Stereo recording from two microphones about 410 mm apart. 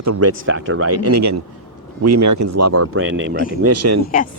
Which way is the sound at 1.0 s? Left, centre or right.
Right.